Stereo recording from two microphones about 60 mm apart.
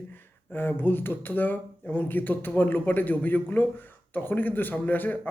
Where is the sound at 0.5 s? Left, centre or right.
Left.